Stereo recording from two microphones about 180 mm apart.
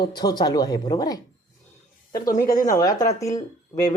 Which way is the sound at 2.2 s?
50° left (ahead or behind).